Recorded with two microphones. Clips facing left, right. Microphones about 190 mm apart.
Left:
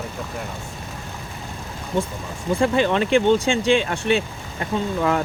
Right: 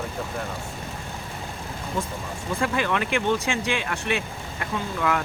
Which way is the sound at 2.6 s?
30° left (ahead or behind).